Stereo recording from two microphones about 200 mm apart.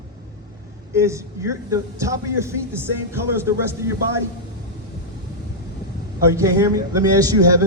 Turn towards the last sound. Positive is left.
turn(degrees=-15)  # may be behind; listen again after turning